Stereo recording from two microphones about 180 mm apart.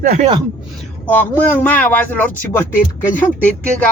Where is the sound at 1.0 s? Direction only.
10° left (ahead or behind).